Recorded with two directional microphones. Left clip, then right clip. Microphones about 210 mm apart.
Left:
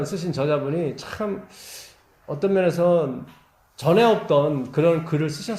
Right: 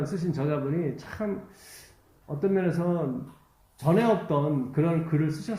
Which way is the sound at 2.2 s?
30° left (ahead or behind).